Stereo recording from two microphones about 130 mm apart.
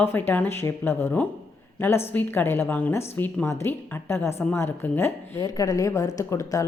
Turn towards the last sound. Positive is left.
turn(degrees=25)  # may be behind; listen again after turning